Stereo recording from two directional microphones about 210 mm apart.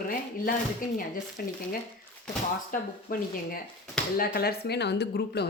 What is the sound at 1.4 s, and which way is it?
Speech, 45° left (ahead or behind).